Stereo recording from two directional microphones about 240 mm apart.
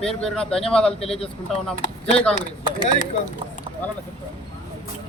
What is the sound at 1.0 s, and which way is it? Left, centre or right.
Speech, left.